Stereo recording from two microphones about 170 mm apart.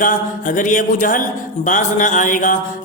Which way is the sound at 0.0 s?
50° left (ahead or behind).